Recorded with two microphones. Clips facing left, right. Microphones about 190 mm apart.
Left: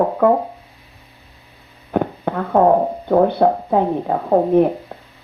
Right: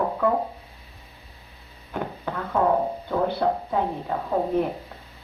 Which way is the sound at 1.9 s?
55° left (ahead or behind).